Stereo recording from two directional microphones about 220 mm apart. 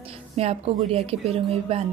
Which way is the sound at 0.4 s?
30° right (ahead or behind).